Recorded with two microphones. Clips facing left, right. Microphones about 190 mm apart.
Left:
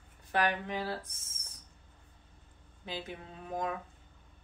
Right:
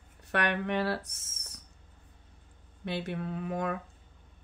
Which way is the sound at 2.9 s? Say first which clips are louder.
Right 7 dB; 70° right (ahead or behind).